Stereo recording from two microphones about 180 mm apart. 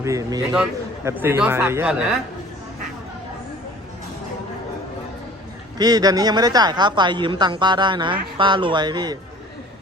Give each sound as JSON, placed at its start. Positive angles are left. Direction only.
{"t": 0.0, "sound": "a woman's voice", "side_deg": -20}
{"t": 5.7, "sound": "a woman's voice", "side_deg": -20}